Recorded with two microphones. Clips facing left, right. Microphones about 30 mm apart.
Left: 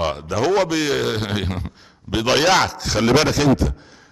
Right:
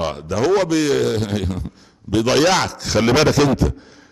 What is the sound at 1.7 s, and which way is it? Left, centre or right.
A man's voice, centre.